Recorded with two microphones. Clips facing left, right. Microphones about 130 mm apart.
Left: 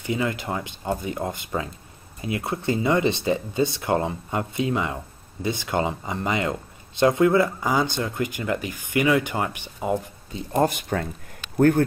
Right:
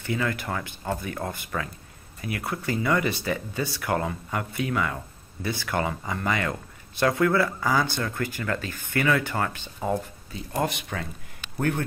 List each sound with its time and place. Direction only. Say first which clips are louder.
0.0 s speech: left 2 dB; 20° left (ahead or behind)
10.5 s speech: left 6 dB; 40° left (ahead or behind)